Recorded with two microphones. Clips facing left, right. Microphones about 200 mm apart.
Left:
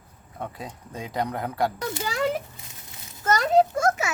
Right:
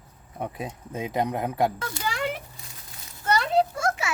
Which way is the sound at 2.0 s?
40° left (ahead or behind).